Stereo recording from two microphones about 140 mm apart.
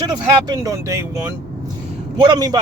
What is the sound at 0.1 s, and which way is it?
Speech, 30° right (ahead or behind).